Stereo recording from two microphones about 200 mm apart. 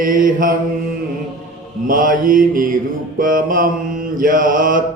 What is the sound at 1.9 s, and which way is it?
Mantra, 45° right (ahead or behind).